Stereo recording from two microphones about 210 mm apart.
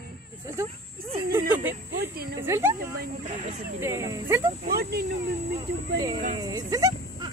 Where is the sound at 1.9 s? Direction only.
50° right (ahead or behind).